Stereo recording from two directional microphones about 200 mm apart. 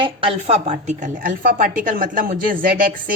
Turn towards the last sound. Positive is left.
turn(degrees=-45)  # may be behind; listen again after turning